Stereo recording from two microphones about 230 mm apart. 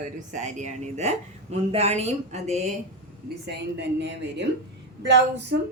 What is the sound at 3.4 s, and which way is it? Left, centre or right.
A woman's voice, right.